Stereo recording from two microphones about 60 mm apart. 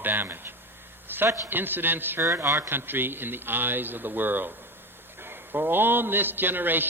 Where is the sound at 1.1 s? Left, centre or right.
Right.